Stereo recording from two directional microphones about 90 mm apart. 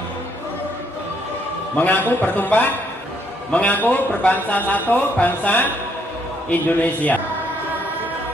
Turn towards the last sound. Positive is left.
turn(degrees=20)  # may be behind; listen again after turning